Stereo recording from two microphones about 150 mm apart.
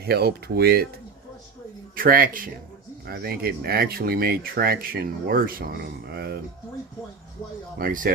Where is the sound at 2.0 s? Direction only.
70° right (ahead or behind).